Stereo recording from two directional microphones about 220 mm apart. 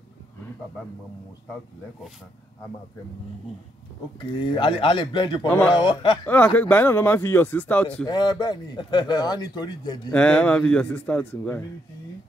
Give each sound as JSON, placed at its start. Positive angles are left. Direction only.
{"t": 4.3, "sound": "speech", "side_deg": 20}
{"t": 6.2, "sound": "a man's voice", "side_deg": 5}
{"t": 8.1, "sound": "a man's voice", "side_deg": 20}
{"t": 10.1, "sound": "a man's voice", "side_deg": 5}